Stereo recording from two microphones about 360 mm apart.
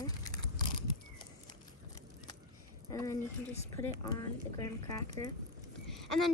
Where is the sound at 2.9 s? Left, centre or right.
Centre.